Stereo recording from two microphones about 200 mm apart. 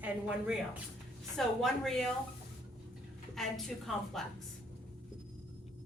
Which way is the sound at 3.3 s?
Centre (ahead or behind).